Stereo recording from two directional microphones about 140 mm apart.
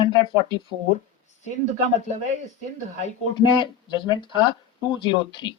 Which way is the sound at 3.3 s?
35° left (ahead or behind).